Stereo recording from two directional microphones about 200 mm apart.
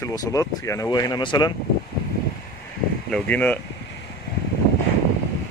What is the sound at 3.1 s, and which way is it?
Speech, 5° left (ahead or behind).